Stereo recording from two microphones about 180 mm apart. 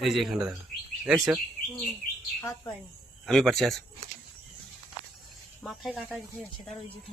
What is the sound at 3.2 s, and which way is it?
Speech, centre (ahead or behind).